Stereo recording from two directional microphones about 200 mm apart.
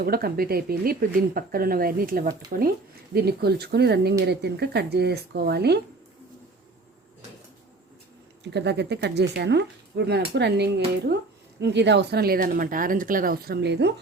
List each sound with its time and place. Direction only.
0.0 s speech: 50° right (ahead or behind)
8.5 s speech: 60° right (ahead or behind)